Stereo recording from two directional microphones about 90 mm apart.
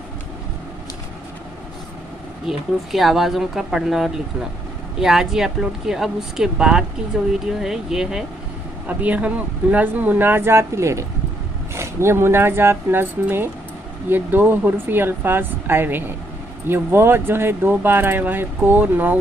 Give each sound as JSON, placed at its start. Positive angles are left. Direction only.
{"t": 2.4, "sound": "speech", "side_deg": 0}